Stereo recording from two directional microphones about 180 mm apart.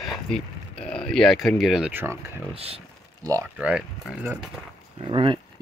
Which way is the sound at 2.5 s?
35° right (ahead or behind).